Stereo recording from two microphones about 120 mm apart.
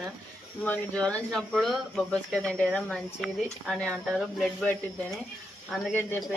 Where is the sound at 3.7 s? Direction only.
10° left (ahead or behind).